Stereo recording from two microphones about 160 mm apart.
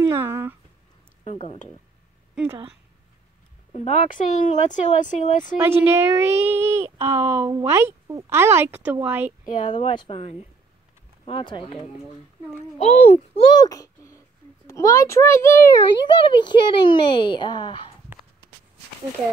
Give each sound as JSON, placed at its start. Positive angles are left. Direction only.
{"t": 0.0, "sound": "speech", "side_deg": -15}
{"t": 1.2, "sound": "speech", "side_deg": 40}
{"t": 2.3, "sound": "speech", "side_deg": -15}
{"t": 3.7, "sound": "speech", "side_deg": 45}
{"t": 5.6, "sound": "speech", "side_deg": -15}
{"t": 9.7, "sound": "speech", "side_deg": 40}
{"t": 12.7, "sound": "speech", "side_deg": 40}
{"t": 13.5, "sound": "a sound", "side_deg": 25}
{"t": 14.7, "sound": "a child's voice", "side_deg": 20}
{"t": 16.2, "sound": "speech", "side_deg": 30}